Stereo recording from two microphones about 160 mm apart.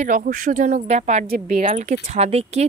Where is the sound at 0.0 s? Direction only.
55° right (ahead or behind).